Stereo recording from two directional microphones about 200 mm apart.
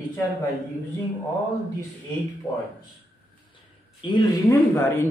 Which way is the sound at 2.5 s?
15° left (ahead or behind).